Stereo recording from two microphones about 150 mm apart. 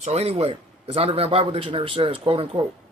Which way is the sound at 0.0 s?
45° right (ahead or behind).